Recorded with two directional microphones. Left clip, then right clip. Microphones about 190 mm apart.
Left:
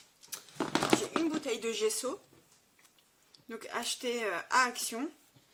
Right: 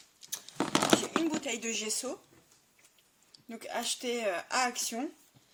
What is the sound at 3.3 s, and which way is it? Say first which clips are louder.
Speech: right 1 dB; 5° left (ahead or behind).